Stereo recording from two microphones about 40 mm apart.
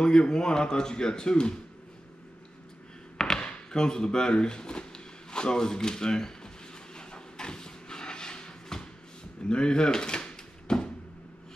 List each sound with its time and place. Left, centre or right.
0.0 s speech: left
3.2 s a sound: centre
9.4 s drawer open or close: left